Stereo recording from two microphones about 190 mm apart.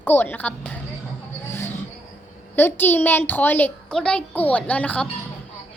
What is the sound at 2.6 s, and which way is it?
A child's voice, 10° left (ahead or behind).